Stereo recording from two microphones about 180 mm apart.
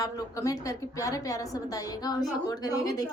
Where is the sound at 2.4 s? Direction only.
20° left (ahead or behind).